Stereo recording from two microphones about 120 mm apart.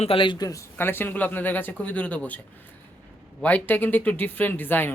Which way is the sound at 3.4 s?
15° left (ahead or behind).